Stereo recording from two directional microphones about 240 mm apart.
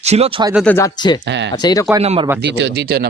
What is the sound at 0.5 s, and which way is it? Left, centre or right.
Speech, centre.